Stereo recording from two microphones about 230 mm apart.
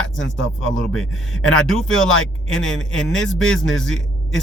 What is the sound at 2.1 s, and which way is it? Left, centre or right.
Speech, left.